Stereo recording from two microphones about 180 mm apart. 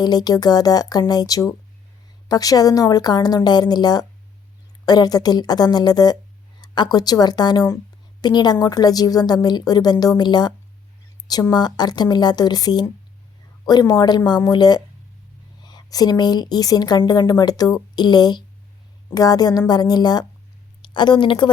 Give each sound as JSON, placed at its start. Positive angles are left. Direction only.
{"t": 0.0, "sound": "a woman's voice", "side_deg": 20}